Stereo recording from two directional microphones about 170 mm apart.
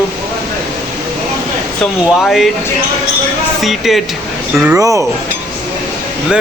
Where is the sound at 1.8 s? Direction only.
Centre (ahead or behind).